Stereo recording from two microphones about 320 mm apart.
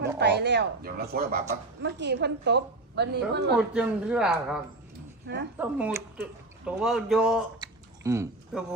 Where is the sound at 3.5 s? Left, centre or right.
Centre.